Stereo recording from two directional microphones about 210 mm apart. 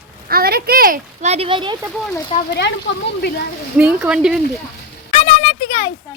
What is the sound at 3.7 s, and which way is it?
Speech, 5° right (ahead or behind).